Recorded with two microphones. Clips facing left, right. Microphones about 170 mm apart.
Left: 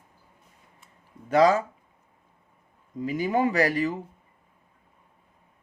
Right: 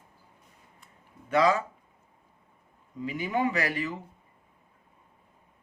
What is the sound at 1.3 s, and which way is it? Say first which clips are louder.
Speech: left 4 dB; 40° left (ahead or behind).